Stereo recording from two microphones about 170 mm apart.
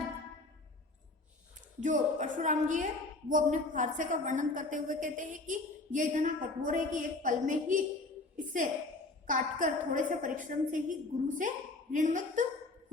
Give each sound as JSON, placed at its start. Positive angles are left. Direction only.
{"t": 1.8, "sound": "a woman's voice", "side_deg": -45}
{"t": 9.2, "sound": "a woman's voice", "side_deg": -50}